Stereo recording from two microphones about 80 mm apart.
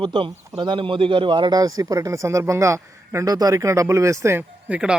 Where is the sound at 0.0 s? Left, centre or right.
Right.